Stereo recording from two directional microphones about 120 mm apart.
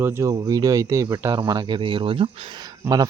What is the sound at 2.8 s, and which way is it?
Speech, 20° right (ahead or behind).